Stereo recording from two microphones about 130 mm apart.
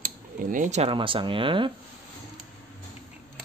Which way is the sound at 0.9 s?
40° right (ahead or behind).